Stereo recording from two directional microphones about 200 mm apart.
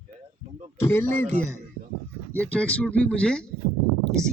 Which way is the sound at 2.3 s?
5° left (ahead or behind).